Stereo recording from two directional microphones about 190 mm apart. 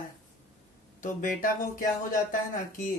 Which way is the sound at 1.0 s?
45° left (ahead or behind).